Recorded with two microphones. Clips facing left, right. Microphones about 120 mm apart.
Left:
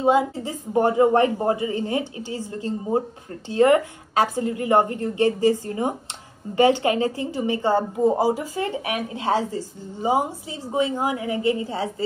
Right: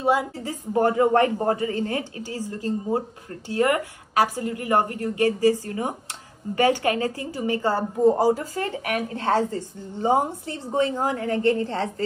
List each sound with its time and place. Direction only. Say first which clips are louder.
0.0 s a woman's voice: left 3 dB; 20° left (ahead or behind)